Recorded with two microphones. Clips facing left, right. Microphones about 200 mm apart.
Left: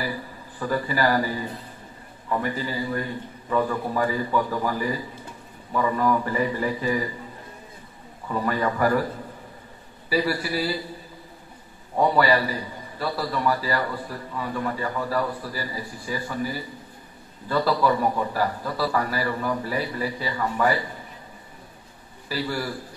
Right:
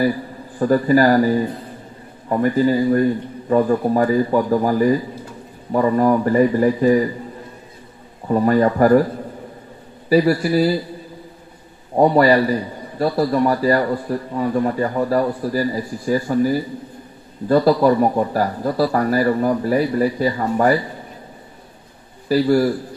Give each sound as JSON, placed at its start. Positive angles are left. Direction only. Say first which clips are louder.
{"t": 0.6, "sound": "speech", "louder": "right 10 dB", "side_deg": -45}
{"t": 8.3, "sound": "speech", "louder": "right 10 dB", "side_deg": -40}
{"t": 10.0, "sound": "speech", "louder": "right 9 dB", "side_deg": -45}
{"t": 11.9, "sound": "speech", "louder": "right 7 dB", "side_deg": -40}
{"t": 22.3, "sound": "speech", "louder": "right 13 dB", "side_deg": -45}